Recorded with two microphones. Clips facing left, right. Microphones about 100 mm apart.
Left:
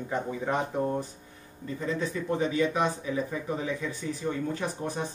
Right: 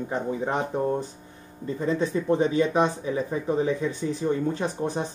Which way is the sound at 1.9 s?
30° right (ahead or behind).